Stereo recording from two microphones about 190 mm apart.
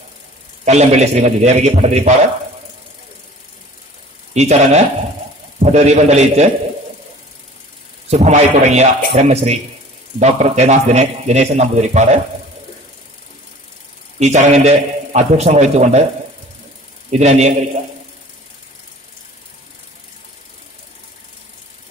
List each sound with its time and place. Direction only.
0.7 s a man's voice: 35° right (ahead or behind)
4.3 s a man's voice: 35° right (ahead or behind)
8.1 s a man's voice: 35° right (ahead or behind)
14.2 s a man's voice: 35° right (ahead or behind)
17.1 s a man's voice: 35° right (ahead or behind)